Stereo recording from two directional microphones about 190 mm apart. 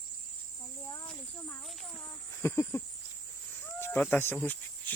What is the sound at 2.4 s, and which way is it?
Speech, 15° left (ahead or behind).